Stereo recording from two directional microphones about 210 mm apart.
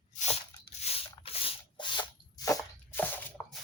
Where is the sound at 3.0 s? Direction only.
10° left (ahead or behind).